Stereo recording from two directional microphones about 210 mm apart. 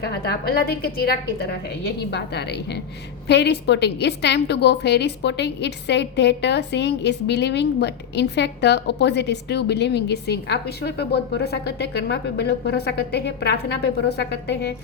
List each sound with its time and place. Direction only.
0.0 s a woman's voice: 50° left (ahead or behind)